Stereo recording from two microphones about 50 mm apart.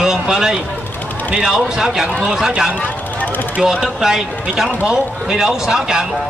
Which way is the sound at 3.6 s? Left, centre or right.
Centre.